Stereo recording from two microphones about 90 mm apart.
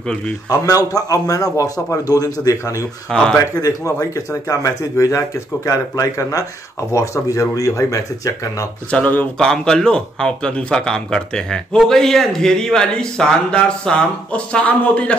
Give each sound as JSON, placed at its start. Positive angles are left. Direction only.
{"t": 0.5, "sound": "a man's voice", "side_deg": 45}
{"t": 3.1, "sound": "speech", "side_deg": 5}
{"t": 3.3, "sound": "a man's voice", "side_deg": 35}
{"t": 8.9, "sound": "speech", "side_deg": 20}
{"t": 9.5, "sound": "speech", "side_deg": 10}